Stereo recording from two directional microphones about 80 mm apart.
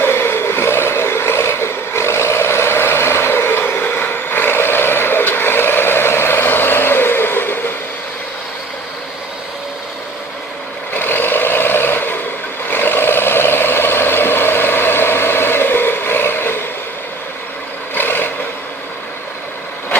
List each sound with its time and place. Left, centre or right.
0.0 s vehicle: left
10.9 s vehicle: left
17.9 s vehicle: left